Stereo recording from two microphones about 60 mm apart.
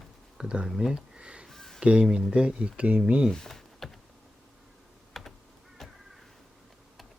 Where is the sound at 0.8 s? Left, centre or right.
Centre.